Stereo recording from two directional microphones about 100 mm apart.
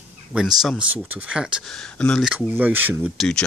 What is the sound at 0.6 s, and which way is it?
Speech, centre (ahead or behind).